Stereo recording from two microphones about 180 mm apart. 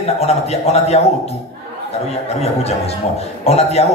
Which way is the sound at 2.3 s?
35° left (ahead or behind).